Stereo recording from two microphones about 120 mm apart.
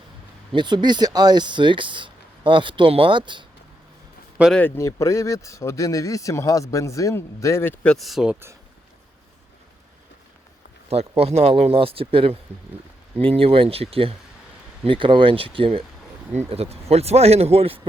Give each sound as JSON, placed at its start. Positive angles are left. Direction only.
{"t": 0.5, "sound": "speech", "side_deg": -40}
{"t": 4.5, "sound": "speech", "side_deg": 15}
{"t": 7.9, "sound": "speech", "side_deg": 0}
{"t": 11.2, "sound": "speech", "side_deg": -60}
{"t": 16.3, "sound": "speech", "side_deg": -65}